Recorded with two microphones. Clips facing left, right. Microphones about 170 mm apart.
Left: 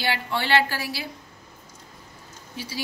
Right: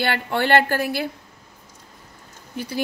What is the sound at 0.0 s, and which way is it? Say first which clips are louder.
A woman's voice: right 5 dB; 55° right (ahead or behind).